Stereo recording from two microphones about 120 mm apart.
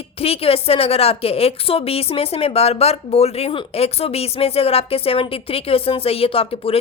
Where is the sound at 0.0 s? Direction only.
55° left (ahead or behind).